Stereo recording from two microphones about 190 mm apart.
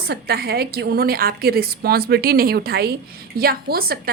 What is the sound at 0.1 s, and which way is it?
A woman's voice, 55° right (ahead or behind).